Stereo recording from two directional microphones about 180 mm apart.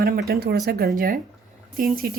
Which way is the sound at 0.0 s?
60° right (ahead or behind).